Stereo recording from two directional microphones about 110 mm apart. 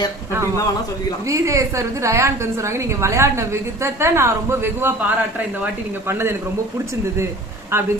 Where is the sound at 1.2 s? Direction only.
30° right (ahead or behind).